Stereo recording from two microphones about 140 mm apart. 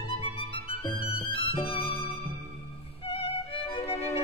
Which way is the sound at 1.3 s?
40° left (ahead or behind).